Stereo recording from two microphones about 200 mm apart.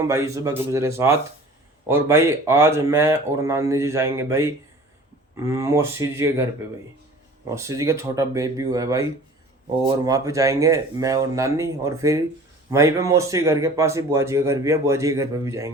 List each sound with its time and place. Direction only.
0.0 s a man's voice: 15° right (ahead or behind)